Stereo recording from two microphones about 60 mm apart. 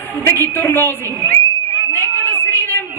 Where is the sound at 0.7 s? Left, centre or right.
Left.